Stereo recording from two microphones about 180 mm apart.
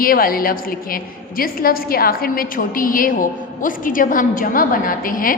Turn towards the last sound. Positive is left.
turn(degrees=50)  # may be behind; listen again after turning